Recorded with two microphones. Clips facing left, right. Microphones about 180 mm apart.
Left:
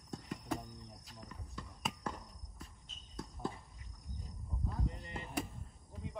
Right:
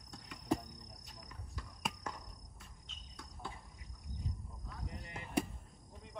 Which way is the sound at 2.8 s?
40° left (ahead or behind).